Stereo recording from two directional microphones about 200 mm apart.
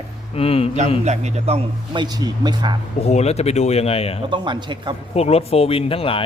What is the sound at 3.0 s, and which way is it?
A man's voice, 30° left (ahead or behind).